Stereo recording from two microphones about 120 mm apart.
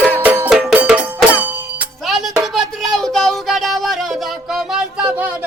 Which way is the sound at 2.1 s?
Centre (ahead or behind).